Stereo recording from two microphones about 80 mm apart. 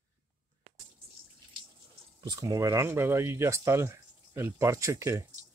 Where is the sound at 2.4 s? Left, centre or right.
Right.